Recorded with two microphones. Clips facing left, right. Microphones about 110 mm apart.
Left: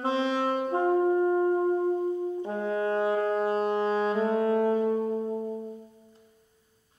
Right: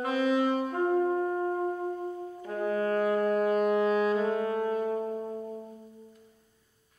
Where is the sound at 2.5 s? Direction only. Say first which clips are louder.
Right 2 dB; 25° left (ahead or behind).